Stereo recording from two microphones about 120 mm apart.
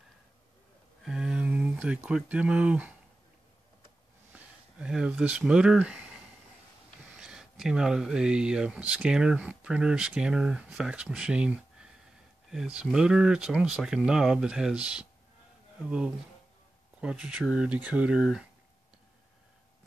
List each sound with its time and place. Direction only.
1.0 s speech: 5° right (ahead or behind)
4.3 s speech: 10° right (ahead or behind)